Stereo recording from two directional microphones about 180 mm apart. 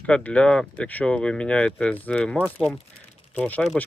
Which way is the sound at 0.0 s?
5° left (ahead or behind).